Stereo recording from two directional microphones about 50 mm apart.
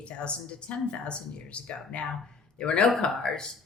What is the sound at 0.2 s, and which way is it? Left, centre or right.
Speech, left.